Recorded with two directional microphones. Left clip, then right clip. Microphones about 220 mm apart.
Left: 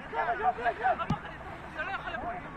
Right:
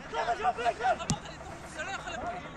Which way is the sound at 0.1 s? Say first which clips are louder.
Left 1 dB; 25° right (ahead or behind).